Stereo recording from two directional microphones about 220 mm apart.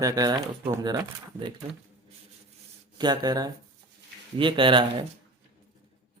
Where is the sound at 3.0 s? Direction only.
20° right (ahead or behind).